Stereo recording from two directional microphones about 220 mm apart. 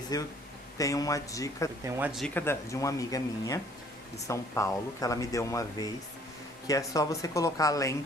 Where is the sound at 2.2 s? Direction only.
10° left (ahead or behind).